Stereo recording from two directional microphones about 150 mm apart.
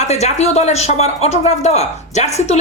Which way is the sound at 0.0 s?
50° left (ahead or behind).